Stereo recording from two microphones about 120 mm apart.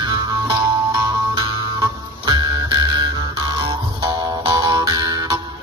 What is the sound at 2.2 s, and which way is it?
Music, 35° right (ahead or behind).